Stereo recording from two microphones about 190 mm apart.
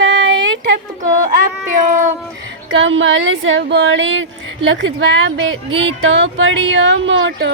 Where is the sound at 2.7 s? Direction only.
85° right.